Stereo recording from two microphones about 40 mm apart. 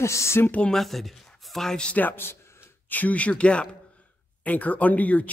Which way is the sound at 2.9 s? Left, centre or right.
Left.